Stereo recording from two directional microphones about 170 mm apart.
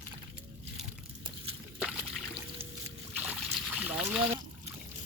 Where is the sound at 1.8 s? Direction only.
5° right (ahead or behind).